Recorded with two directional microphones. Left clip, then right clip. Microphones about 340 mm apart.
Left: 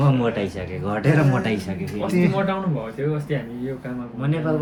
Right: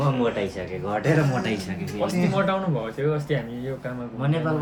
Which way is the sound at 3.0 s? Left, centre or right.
Right.